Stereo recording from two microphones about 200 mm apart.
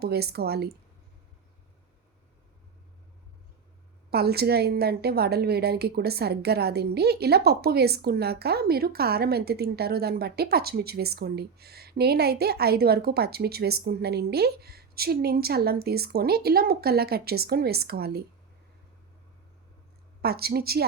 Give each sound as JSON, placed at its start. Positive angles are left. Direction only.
{"t": 0.0, "sound": "a woman's voice", "side_deg": -55}
{"t": 4.1, "sound": "a woman's voice", "side_deg": -55}
{"t": 20.2, "sound": "a woman's voice", "side_deg": -50}